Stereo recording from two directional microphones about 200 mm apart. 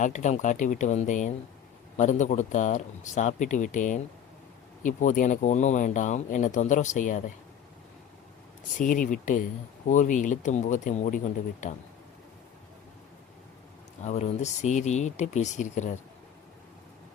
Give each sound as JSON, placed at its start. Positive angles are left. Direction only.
{"t": 0.0, "sound": "speech", "side_deg": 40}
{"t": 8.8, "sound": "speech", "side_deg": 40}
{"t": 14.0, "sound": "speech", "side_deg": 35}